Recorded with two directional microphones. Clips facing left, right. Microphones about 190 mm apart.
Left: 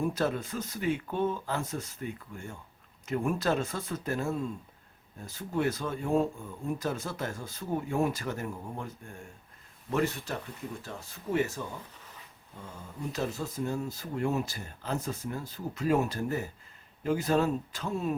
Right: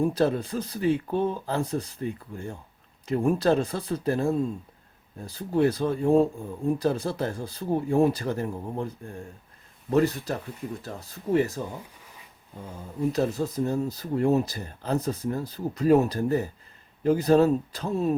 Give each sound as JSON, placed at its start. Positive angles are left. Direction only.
{"t": 0.0, "sound": "speech", "side_deg": -35}
{"t": 13.1, "sound": "speech", "side_deg": -40}